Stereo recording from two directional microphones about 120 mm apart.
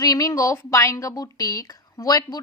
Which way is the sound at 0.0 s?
30° left (ahead or behind).